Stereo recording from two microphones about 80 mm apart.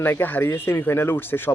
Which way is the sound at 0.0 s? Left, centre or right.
Left.